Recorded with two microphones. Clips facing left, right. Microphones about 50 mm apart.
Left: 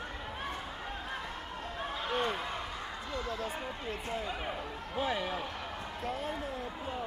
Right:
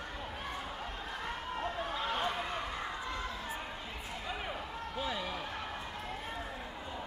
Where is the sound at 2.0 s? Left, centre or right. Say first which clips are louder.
Left 3 dB; centre.